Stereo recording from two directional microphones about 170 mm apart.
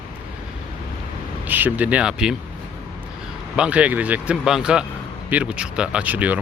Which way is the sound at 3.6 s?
5° right (ahead or behind).